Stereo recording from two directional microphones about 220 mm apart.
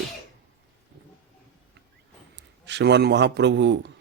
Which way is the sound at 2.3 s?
55° right (ahead or behind).